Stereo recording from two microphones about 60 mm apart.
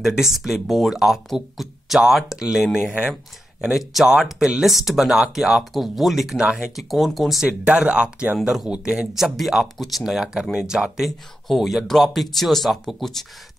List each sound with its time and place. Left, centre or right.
0.0 s speech: centre
7.4 s speech: centre
11.1 s speech: centre